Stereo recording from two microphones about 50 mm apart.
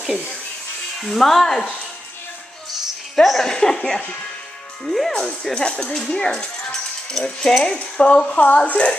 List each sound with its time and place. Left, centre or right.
1.0 s speech: centre
3.2 s a woman's voice: centre; by 8.9 s left